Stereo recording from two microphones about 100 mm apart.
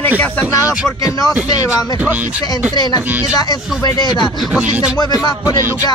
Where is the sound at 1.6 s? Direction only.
20° right (ahead or behind).